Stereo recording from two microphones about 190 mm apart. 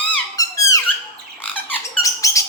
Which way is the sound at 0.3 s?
15° left (ahead or behind).